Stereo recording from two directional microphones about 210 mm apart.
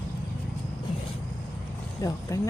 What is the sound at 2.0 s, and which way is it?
Speech, 15° left (ahead or behind).